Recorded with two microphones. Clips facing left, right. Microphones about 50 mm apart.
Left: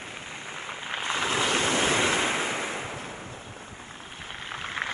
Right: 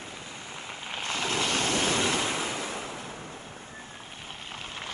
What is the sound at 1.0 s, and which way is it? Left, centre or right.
Waves, left.